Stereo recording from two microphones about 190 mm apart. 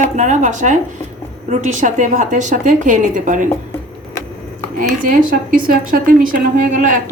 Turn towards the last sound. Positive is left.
turn(degrees=-45)  # may be behind; listen again after turning